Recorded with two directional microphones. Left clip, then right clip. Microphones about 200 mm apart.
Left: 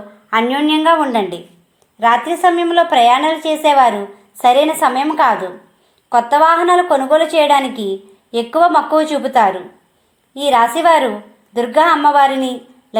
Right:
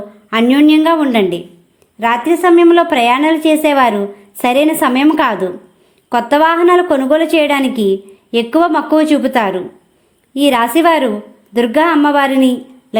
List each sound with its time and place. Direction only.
0.3 s a woman's voice: 40° right (ahead or behind)